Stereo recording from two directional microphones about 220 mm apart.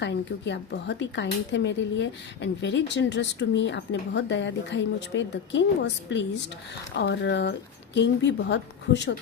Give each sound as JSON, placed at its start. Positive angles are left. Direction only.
{"t": 0.0, "sound": "speech", "side_deg": 55}